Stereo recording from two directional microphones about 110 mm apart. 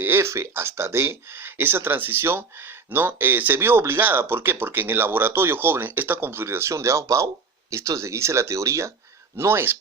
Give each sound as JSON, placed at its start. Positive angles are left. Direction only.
{"t": 0.0, "sound": "speech", "side_deg": -20}